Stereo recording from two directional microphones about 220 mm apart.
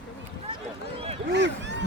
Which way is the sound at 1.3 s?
55° right (ahead or behind).